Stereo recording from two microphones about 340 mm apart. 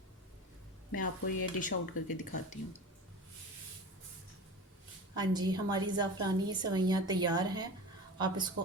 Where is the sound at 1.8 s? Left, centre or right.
Left.